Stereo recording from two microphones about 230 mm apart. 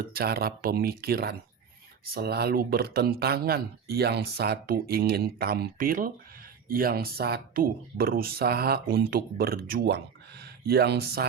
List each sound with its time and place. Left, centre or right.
0.1 s speech: right